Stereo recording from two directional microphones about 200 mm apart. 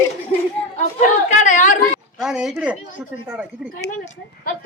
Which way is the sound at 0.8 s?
35° left (ahead or behind).